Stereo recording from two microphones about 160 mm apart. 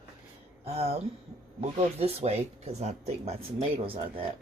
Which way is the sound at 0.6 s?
40° right (ahead or behind).